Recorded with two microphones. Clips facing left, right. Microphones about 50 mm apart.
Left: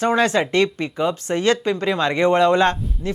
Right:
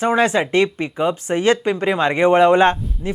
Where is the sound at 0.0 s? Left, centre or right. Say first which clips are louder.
Right 1 dB; centre.